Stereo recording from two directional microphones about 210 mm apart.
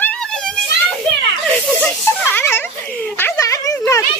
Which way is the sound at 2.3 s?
10° left (ahead or behind).